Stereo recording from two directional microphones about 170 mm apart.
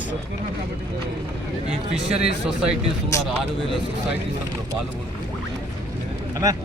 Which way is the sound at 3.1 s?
20° left (ahead or behind).